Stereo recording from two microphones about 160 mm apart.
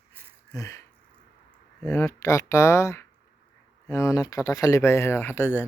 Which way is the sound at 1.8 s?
15° left (ahead or behind).